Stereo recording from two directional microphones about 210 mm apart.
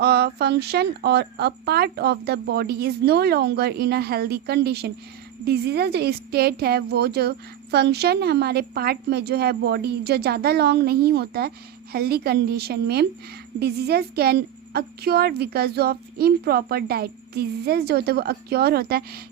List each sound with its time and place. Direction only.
0.0 s a woman's voice: 50° right (ahead or behind)